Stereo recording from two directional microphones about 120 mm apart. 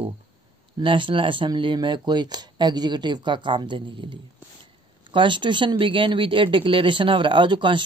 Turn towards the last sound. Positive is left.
turn(degrees=-40)  # may be behind; listen again after turning